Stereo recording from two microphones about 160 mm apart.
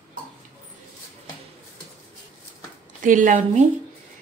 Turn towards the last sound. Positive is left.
turn(degrees=-50)  # may be behind; listen again after turning